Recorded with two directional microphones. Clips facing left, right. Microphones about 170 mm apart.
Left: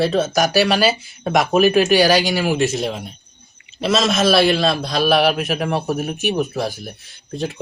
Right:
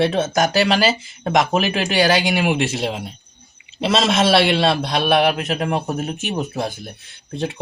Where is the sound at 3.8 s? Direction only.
30° right (ahead or behind).